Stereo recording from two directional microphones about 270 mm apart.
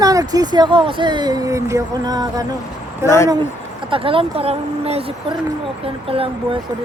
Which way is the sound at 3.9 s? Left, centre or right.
Centre.